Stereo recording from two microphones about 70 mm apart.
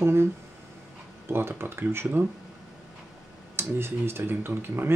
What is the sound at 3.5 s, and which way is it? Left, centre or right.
Speech, right.